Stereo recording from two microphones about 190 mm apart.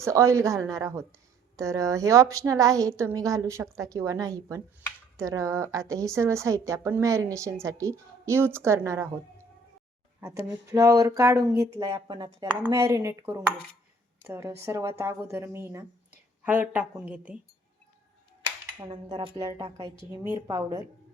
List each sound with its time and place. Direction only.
0.0 s a woman's voice: 15° right (ahead or behind)
10.2 s a woman's voice: 15° right (ahead or behind)
18.4 s cutlery: 25° right (ahead or behind)
19.4 s a woman's voice: 20° right (ahead or behind)